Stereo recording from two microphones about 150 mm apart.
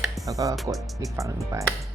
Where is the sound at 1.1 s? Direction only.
20° right (ahead or behind).